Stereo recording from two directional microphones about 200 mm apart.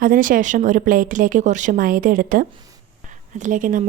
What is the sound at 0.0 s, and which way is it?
A woman's voice, 45° right (ahead or behind).